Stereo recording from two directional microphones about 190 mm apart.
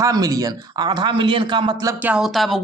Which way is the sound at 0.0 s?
20° right (ahead or behind).